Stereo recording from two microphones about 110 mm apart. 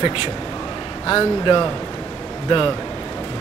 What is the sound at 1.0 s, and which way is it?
Speech, 45° left (ahead or behind).